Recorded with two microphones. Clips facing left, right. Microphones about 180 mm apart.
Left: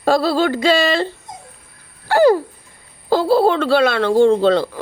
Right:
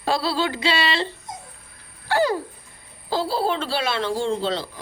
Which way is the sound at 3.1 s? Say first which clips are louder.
Left 9 dB; 55° left (ahead or behind).